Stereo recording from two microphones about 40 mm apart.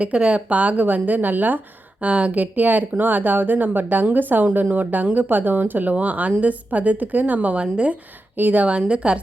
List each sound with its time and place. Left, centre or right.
0.0 s a woman's voice: right
2.0 s a woman's voice: right
5.9 s a woman's voice: right
8.4 s speech: right
8.6 s a woman's voice: right